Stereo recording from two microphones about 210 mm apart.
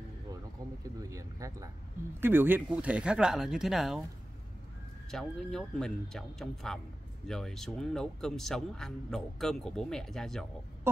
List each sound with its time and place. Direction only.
1.1 s speech: 15° right (ahead or behind)
5.1 s speech: 5° left (ahead or behind)